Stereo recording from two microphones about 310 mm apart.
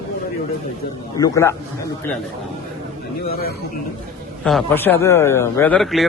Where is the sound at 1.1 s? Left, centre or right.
Centre.